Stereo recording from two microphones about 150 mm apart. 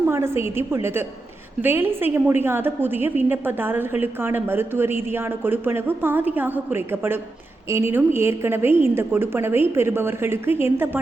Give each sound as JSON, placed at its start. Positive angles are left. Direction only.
{"t": 0.1, "sound": "a woman's voice", "side_deg": -15}